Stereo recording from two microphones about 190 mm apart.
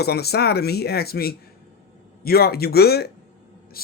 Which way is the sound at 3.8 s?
50° left (ahead or behind).